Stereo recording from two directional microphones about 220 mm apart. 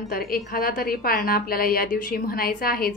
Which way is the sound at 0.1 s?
40° left (ahead or behind).